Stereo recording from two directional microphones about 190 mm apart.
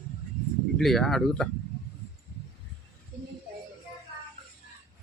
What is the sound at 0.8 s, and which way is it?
Speech, centre (ahead or behind).